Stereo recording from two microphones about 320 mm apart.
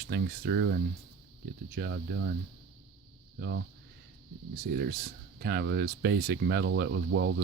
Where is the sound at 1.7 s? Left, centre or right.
Right.